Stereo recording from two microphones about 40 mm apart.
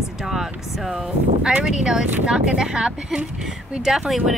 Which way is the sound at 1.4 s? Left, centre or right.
Right.